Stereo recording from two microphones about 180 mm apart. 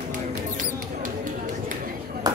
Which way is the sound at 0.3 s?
45° right (ahead or behind).